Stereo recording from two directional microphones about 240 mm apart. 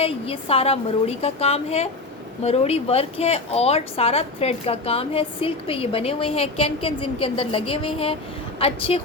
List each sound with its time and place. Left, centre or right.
0.0 s a woman's voice: left